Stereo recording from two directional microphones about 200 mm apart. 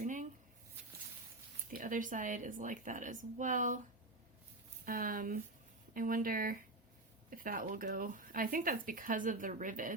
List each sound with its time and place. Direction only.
0.0 s a sound: 40° right (ahead or behind)
1.7 s speech: 40° right (ahead or behind)
4.9 s speech: 45° right (ahead or behind)